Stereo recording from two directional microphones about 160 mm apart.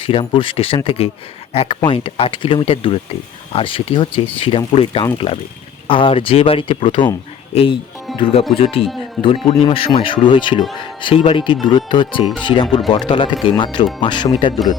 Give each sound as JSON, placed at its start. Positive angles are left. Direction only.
{"t": 0.0, "sound": "speech", "side_deg": 35}